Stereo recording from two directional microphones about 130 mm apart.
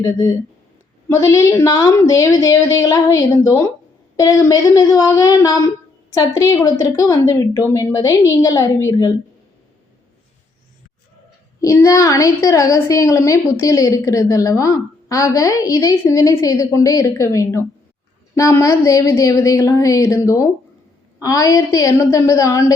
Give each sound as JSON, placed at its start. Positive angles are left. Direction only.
{"t": 0.0, "sound": "a woman's voice", "side_deg": 20}
{"t": 11.6, "sound": "a woman's voice", "side_deg": 25}